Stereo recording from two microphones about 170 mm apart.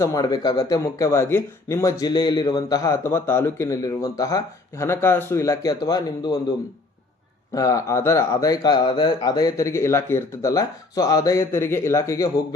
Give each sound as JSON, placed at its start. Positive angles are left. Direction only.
{"t": 0.0, "sound": "speech", "side_deg": 20}
{"t": 7.5, "sound": "speech", "side_deg": 20}